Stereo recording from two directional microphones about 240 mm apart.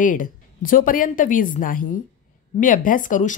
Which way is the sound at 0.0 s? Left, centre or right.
Left.